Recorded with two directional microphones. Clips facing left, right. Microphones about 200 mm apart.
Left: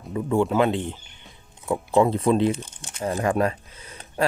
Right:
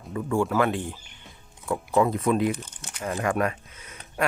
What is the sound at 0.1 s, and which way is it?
Speech, 20° left (ahead or behind).